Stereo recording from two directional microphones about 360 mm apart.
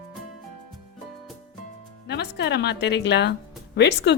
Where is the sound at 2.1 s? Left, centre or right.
Left.